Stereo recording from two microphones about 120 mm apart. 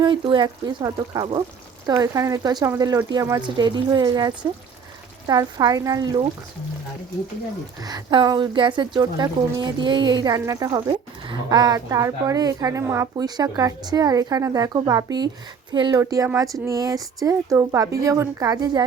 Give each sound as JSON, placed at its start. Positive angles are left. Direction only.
{"t": 0.0, "sound": "a woman's voice", "side_deg": -40}
{"t": 7.8, "sound": "a woman's voice", "side_deg": -35}
{"t": 10.7, "sound": "a woman's voice", "side_deg": -40}
{"t": 16.0, "sound": "speech", "side_deg": -30}